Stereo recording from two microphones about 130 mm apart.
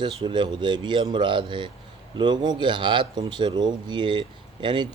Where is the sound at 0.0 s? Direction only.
35° right (ahead or behind).